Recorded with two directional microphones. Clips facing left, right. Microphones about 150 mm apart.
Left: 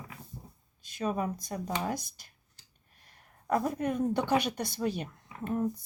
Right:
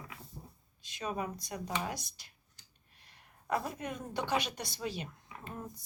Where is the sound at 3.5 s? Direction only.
50° left (ahead or behind).